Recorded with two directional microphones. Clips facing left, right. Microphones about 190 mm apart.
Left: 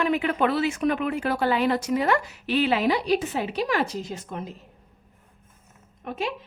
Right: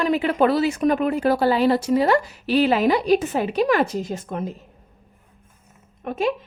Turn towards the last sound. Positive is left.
turn(degrees=-50)  # may be behind; listen again after turning